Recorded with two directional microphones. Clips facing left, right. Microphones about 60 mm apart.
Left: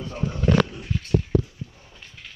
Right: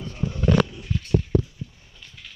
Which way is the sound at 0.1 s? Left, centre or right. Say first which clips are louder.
Even; left.